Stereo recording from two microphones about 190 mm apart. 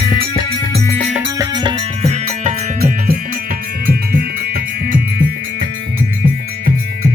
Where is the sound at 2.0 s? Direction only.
35° right (ahead or behind).